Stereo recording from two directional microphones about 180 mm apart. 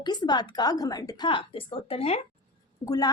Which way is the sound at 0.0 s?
25° left (ahead or behind).